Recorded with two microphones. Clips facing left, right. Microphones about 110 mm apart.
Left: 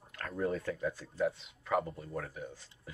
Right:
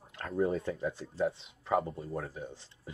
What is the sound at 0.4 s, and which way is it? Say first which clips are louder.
Speech: right 3 dB; 25° right (ahead or behind).